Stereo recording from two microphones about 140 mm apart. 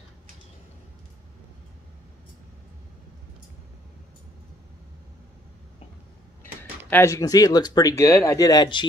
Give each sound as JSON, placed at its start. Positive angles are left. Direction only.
{"t": 6.9, "sound": "speech", "side_deg": 20}